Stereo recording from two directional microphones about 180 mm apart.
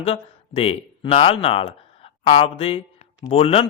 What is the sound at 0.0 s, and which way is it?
A man's voice, 35° left (ahead or behind).